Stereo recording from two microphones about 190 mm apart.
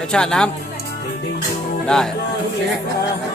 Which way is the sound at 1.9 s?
Centre (ahead or behind).